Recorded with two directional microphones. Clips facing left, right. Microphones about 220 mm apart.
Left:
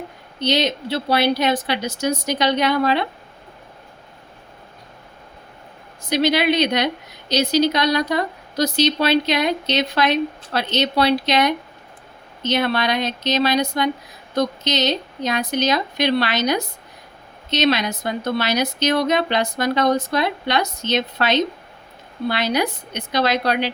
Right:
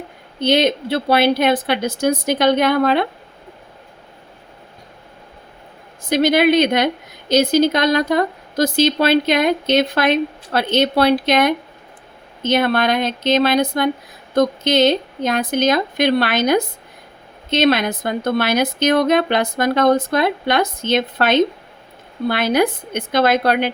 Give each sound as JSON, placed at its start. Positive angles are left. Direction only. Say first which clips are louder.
{"t": 0.3, "sound": "a woman's voice", "louder": "right 5 dB", "side_deg": -55}
{"t": 6.0, "sound": "a woman's voice", "louder": "right 4 dB", "side_deg": -50}